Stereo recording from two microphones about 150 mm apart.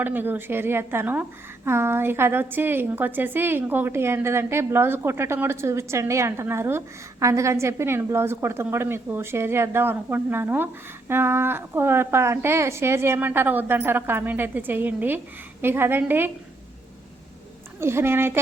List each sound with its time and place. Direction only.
0.0 s a woman's voice: 15° right (ahead or behind)
17.7 s a woman's voice: 15° right (ahead or behind)